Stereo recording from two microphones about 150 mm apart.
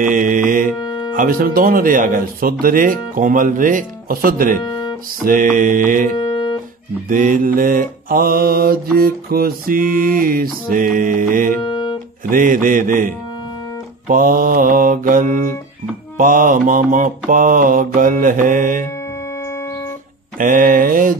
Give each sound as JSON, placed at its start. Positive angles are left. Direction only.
{"t": 0.0, "sound": "mantra", "side_deg": -65}
{"t": 0.7, "sound": "music", "side_deg": 25}
{"t": 1.1, "sound": "speech", "side_deg": -70}
{"t": 5.2, "sound": "mantra", "side_deg": -65}
{"t": 7.1, "sound": "speech", "side_deg": -65}
{"t": 11.6, "sound": "music", "side_deg": 30}
{"t": 12.3, "sound": "mantra", "side_deg": -65}
{"t": 20.3, "sound": "mantra", "side_deg": -65}